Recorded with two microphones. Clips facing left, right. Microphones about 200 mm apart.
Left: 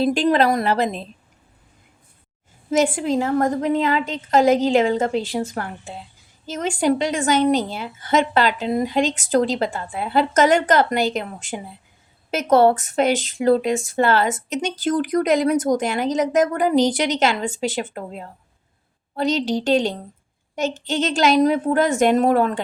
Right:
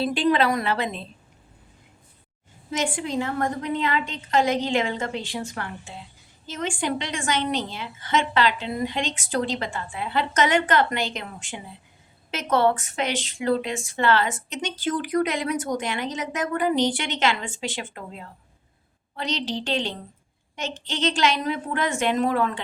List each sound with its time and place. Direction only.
0.0 s a woman's voice: 45° left (ahead or behind)
2.6 s a woman's voice: 40° left (ahead or behind)
6.4 s a woman's voice: 40° left (ahead or behind)